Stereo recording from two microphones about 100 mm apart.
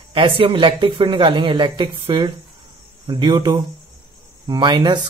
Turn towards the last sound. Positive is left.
turn(degrees=-50)  # may be behind; listen again after turning